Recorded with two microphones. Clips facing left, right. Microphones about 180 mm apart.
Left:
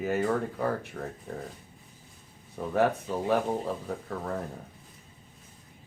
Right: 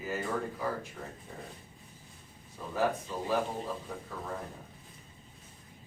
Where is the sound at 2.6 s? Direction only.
65° left (ahead or behind).